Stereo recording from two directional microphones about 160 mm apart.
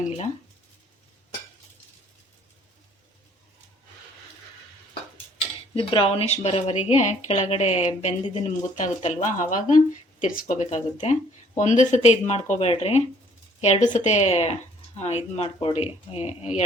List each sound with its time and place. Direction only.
5.7 s speech: 35° left (ahead or behind)